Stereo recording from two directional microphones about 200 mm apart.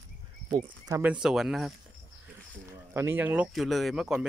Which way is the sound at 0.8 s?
15° right (ahead or behind).